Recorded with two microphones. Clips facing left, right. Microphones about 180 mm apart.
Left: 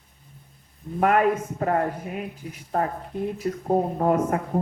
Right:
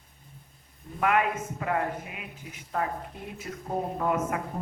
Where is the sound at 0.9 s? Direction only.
40° left (ahead or behind).